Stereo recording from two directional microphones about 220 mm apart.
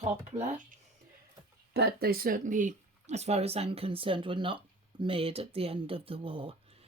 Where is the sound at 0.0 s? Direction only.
30° right (ahead or behind).